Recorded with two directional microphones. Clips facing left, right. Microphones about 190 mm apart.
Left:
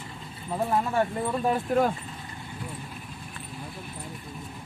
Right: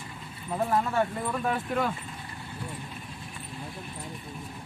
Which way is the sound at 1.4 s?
40° left (ahead or behind).